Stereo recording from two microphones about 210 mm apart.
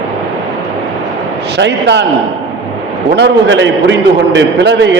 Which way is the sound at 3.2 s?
60° right (ahead or behind).